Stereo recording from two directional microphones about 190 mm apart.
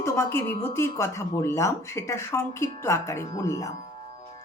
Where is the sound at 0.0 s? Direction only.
15° left (ahead or behind).